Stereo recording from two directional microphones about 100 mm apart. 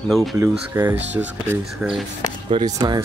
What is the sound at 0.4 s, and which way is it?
Speech, 20° right (ahead or behind).